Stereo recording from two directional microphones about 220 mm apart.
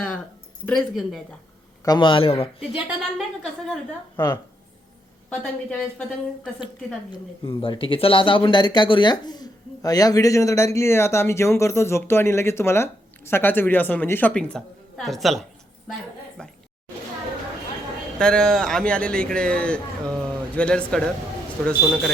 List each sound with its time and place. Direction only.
0.6 s a man's voice: 5° left (ahead or behind)
1.8 s a man's voice: 20° left (ahead or behind)
2.6 s a man's voice: 5° right (ahead or behind)
5.3 s a man's voice: 5° left (ahead or behind)
7.1 s speech: 20° left (ahead or behind); by 16.5 s 5° left (ahead or behind)
18.2 s a man's voice: 5° left (ahead or behind)